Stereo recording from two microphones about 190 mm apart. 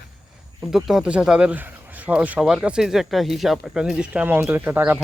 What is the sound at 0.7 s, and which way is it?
Speech, centre (ahead or behind).